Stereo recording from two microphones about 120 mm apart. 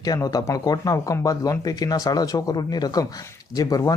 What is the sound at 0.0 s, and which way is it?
Speech, 30° left (ahead or behind).